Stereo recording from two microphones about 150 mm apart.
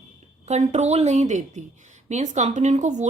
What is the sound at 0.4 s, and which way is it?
Speech, 50° right (ahead or behind).